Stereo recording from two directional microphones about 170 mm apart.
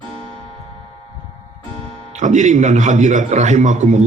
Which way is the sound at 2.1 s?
45° right (ahead or behind).